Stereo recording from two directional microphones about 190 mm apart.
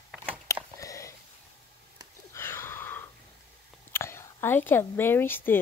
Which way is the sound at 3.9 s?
15° left (ahead or behind).